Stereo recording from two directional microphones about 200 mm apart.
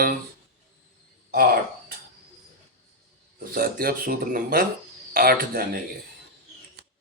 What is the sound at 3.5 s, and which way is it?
Speech, 45° right (ahead or behind).